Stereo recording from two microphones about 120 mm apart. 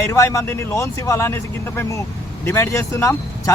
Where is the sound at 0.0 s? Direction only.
25° left (ahead or behind).